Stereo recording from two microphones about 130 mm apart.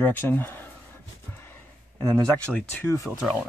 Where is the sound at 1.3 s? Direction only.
20° left (ahead or behind).